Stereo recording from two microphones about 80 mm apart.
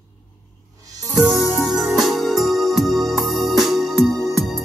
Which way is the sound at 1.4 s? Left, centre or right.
Left.